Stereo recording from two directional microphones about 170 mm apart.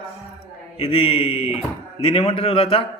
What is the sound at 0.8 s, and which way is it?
A man's voice, 35° left (ahead or behind).